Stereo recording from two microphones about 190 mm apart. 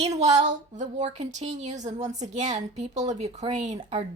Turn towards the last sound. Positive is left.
turn(degrees=-35)  # may be behind; listen again after turning